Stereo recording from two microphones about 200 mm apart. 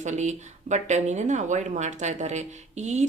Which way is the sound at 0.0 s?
35° right (ahead or behind).